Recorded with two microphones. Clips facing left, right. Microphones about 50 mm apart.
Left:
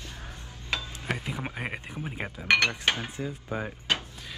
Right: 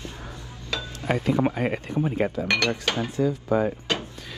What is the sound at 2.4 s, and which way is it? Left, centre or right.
Speech, left.